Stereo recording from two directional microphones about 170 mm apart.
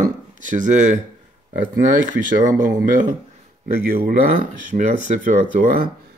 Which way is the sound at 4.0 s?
55° right (ahead or behind).